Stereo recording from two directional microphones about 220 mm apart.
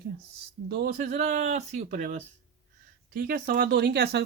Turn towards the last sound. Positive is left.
turn(degrees=-50)  # may be behind; listen again after turning